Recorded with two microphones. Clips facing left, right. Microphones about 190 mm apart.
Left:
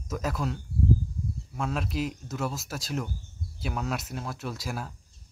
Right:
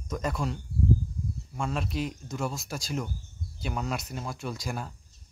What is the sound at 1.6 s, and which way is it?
Speech, centre (ahead or behind).